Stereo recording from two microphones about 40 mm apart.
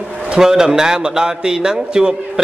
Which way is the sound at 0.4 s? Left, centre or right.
Centre.